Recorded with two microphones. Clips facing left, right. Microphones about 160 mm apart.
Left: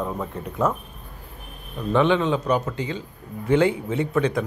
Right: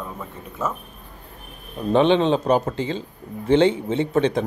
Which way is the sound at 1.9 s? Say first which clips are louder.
Right 3 dB; 25° right (ahead or behind).